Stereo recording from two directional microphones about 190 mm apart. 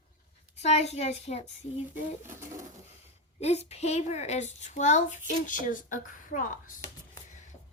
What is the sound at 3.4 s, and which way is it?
A woman's voice, 35° left (ahead or behind).